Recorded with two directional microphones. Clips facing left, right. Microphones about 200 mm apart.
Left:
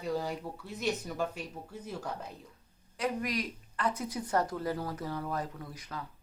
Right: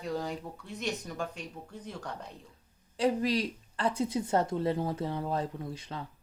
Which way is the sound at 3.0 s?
30° right (ahead or behind).